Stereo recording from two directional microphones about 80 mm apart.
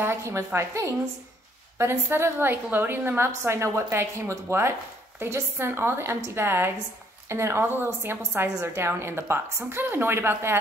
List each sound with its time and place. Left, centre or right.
0.0 s a woman's voice: right